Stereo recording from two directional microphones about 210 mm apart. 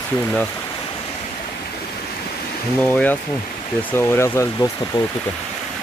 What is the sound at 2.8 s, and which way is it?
Speech, 10° left (ahead or behind).